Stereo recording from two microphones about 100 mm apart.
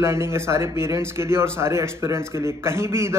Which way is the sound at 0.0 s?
25° right (ahead or behind).